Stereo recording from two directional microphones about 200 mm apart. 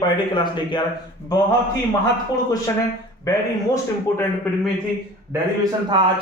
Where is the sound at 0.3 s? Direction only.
25° left (ahead or behind).